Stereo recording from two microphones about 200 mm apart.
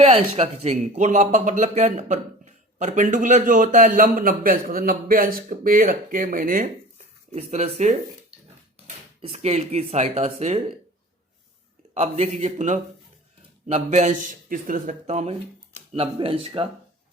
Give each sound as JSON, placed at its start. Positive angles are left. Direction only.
{"t": 0.0, "sound": "speech", "side_deg": -30}
{"t": 7.3, "sound": "speech", "side_deg": -35}
{"t": 9.2, "sound": "speech", "side_deg": -30}
{"t": 11.9, "sound": "speech", "side_deg": -30}